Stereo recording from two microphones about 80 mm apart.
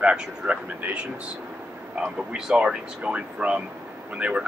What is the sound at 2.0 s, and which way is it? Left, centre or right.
Speech, centre.